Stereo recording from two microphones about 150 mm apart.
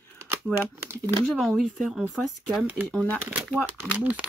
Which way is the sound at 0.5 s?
15° right (ahead or behind).